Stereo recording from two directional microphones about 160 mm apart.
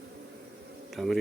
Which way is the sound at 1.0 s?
Centre (ahead or behind).